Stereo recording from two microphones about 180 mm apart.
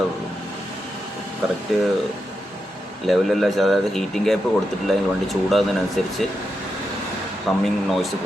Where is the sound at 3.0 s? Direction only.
Centre (ahead or behind).